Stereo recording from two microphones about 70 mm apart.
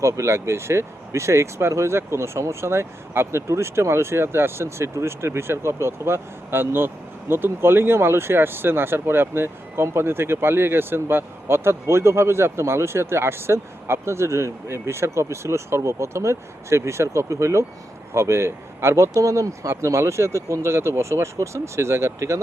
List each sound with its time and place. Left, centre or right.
0.0 s speech: right